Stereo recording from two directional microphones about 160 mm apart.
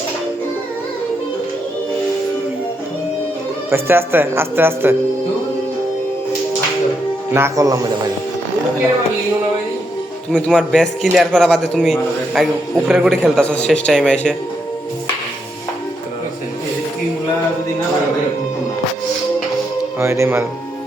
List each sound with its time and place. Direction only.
3.7 s speech: 15° right (ahead or behind)
7.3 s a man's voice: 20° right (ahead or behind)
10.3 s a man's voice: 5° left (ahead or behind)
20.0 s speech: 15° right (ahead or behind)